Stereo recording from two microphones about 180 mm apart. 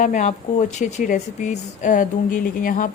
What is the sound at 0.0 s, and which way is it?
A woman's voice, 40° left (ahead or behind).